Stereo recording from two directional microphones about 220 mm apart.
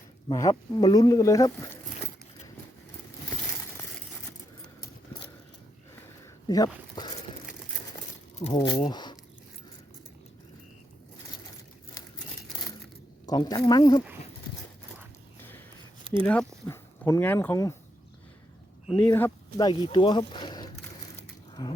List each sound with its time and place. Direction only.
0.3 s speech: 15° left (ahead or behind)
4.8 s keys jangling: 20° left (ahead or behind)
6.5 s speech: 15° left (ahead or behind)
8.5 s speech: 20° left (ahead or behind)
13.2 s speech: 20° left (ahead or behind)
15.4 s a sound: 10° left (ahead or behind)
16.2 s speech: 5° left (ahead or behind)
18.9 s speech: 10° left (ahead or behind)
21.2 s a sound: 20° left (ahead or behind)